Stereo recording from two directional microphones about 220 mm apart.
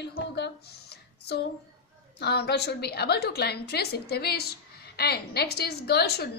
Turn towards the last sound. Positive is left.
turn(degrees=45)  # may be behind; listen again after turning